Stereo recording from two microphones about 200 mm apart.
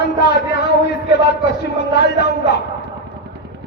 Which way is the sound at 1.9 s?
55° left (ahead or behind).